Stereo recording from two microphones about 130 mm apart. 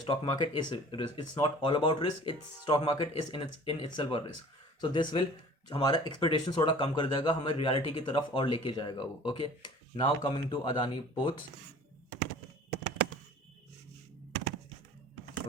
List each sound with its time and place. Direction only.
0.0 s speech: 40° left (ahead or behind)